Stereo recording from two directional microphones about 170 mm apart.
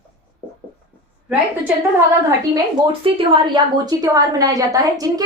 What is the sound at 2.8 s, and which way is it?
A woman's voice, 30° right (ahead or behind).